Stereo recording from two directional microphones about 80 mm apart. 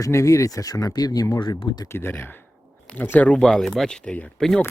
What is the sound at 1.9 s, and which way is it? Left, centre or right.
Speech, left.